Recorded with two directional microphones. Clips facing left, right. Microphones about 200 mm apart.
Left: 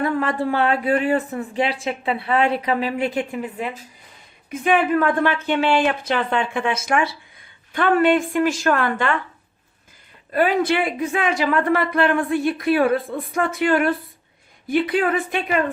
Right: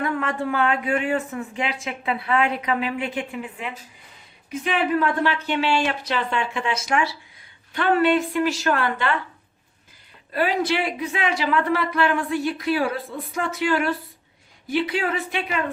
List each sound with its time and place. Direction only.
0.0 s speech: 35° left (ahead or behind)
4.5 s speech: 50° left (ahead or behind)
10.3 s speech: 50° left (ahead or behind)